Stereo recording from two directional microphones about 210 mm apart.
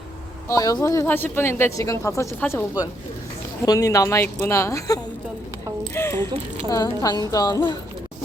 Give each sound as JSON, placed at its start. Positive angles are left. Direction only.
{"t": 0.4, "sound": "speech", "side_deg": 15}